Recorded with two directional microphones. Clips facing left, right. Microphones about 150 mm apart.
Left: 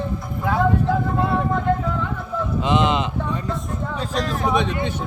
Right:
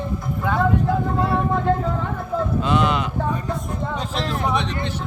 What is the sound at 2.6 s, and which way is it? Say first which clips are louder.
Speech: left 2 dB; 20° left (ahead or behind).